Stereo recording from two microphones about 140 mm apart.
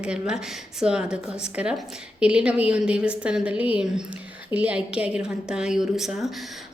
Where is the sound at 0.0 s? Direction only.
5° right (ahead or behind).